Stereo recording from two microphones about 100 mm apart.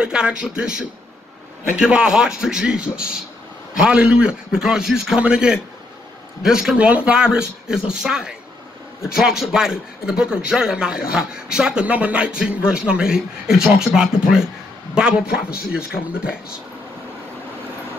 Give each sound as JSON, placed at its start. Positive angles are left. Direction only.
{"t": 0.0, "sound": "a man's voice", "side_deg": -10}